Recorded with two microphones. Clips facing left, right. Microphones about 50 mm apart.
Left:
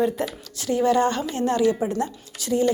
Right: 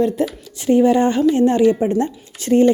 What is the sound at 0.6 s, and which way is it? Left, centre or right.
A woman's voice, right.